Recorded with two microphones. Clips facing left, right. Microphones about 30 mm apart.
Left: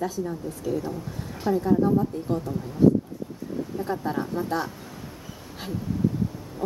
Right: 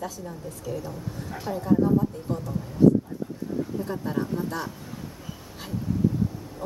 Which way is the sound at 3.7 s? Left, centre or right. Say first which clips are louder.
Left 4 dB; centre.